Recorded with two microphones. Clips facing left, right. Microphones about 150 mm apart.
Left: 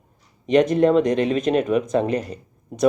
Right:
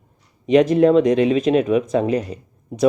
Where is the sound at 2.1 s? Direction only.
35° left (ahead or behind).